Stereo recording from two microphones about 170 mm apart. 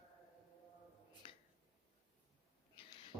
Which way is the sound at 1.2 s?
30° left (ahead or behind).